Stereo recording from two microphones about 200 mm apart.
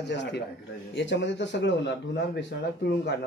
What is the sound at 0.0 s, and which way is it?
A man's voice, 60° left (ahead or behind).